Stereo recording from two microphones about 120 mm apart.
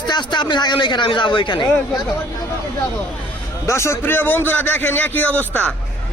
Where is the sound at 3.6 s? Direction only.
25° left (ahead or behind).